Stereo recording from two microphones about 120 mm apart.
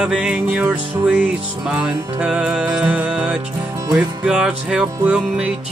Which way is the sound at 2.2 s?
10° right (ahead or behind).